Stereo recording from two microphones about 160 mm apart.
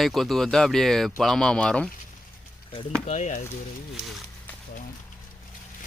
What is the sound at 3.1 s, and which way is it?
Speech, 50° left (ahead or behind).